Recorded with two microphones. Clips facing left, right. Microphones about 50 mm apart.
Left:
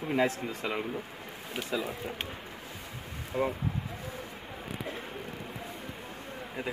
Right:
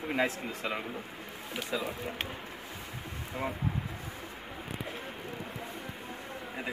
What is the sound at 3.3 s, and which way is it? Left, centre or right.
Speech, centre.